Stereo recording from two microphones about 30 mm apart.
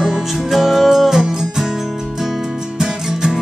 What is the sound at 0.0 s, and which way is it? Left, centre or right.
Music, centre.